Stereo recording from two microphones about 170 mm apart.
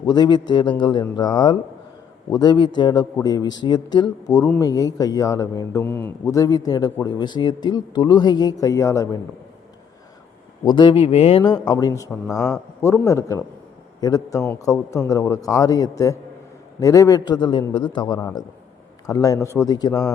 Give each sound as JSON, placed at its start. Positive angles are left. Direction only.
{"t": 0.0, "sound": "a man's voice", "side_deg": 25}
{"t": 10.7, "sound": "a man's voice", "side_deg": 30}